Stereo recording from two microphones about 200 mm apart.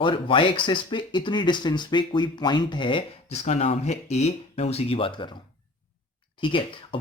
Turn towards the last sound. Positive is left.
turn(degrees=25)  # may be behind; listen again after turning